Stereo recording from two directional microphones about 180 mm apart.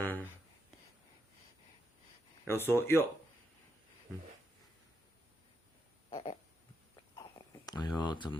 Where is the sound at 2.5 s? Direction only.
10° left (ahead or behind).